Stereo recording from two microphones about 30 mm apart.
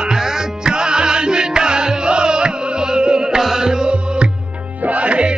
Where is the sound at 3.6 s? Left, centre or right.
Right.